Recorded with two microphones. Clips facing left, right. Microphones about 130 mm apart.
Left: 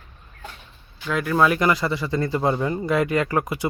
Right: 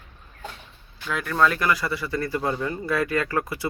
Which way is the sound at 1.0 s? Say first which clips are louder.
Left 5 dB; 5° left (ahead or behind).